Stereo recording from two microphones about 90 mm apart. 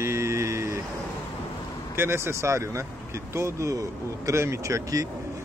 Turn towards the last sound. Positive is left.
turn(degrees=-40)  # may be behind; listen again after turning